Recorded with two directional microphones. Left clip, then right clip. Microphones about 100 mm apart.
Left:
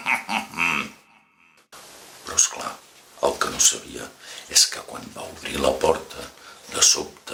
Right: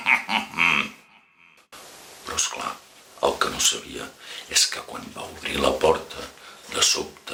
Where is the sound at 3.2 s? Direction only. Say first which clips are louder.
Left 1 dB; 20° left (ahead or behind).